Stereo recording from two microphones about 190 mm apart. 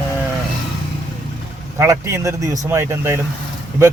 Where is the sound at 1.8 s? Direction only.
15° right (ahead or behind).